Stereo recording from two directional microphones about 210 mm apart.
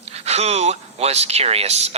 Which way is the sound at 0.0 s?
30° right (ahead or behind).